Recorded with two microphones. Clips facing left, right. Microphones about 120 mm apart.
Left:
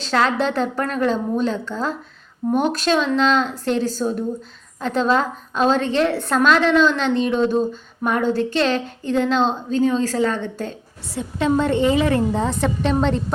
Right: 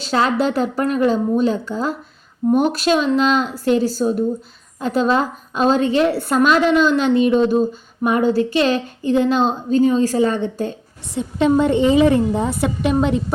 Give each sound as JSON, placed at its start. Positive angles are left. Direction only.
{"t": 0.0, "sound": "a woman's voice", "side_deg": -10}